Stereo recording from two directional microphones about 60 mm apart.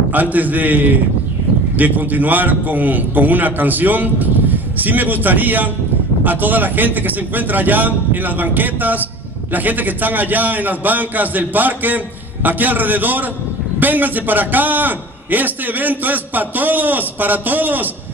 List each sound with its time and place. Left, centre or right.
0.1 s a man's voice: right